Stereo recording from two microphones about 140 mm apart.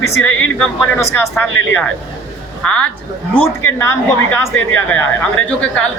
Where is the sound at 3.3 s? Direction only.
20° left (ahead or behind).